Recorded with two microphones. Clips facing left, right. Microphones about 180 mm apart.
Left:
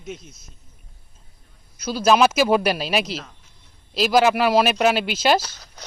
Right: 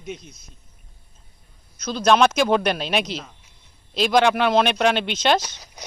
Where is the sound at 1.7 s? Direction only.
5° left (ahead or behind).